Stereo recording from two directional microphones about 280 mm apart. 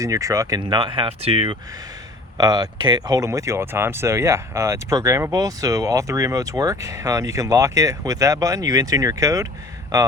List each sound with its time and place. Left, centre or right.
0.0 s speech: centre